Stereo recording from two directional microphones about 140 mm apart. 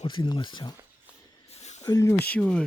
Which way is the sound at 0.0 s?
35° left (ahead or behind).